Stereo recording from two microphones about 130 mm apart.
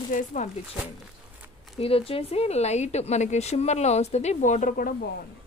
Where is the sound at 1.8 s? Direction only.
50° left (ahead or behind); by 4.9 s 85° left.